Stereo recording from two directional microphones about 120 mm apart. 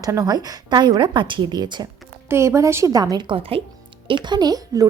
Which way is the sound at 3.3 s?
50° right (ahead or behind).